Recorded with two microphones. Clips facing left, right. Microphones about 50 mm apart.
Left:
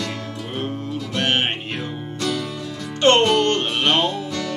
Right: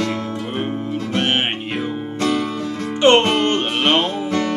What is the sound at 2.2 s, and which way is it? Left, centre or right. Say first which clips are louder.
Music: right 5 dB; right.